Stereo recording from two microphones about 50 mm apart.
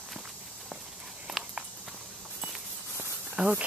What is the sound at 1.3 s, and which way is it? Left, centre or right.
Walk, centre.